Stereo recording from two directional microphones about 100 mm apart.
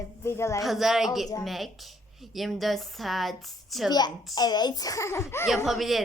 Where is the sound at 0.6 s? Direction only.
Centre (ahead or behind).